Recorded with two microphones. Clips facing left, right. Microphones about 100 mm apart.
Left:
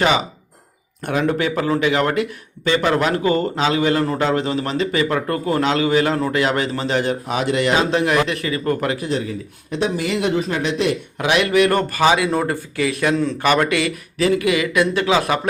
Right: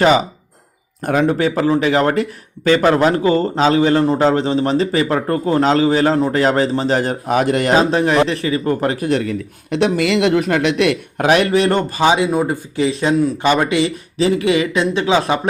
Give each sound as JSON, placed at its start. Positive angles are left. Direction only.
{"t": 1.3, "sound": "a man's voice", "side_deg": -35}
{"t": 9.0, "sound": "a man's voice", "side_deg": -60}
{"t": 11.2, "sound": "speech", "side_deg": -40}